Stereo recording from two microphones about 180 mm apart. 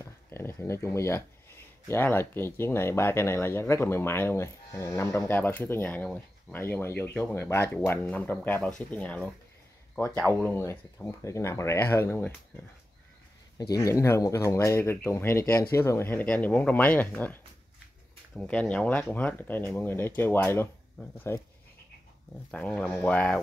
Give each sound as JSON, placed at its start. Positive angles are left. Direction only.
{"t": 0.0, "sound": "speech", "side_deg": 15}
{"t": 13.6, "sound": "speech", "side_deg": 20}
{"t": 22.5, "sound": "speech", "side_deg": 5}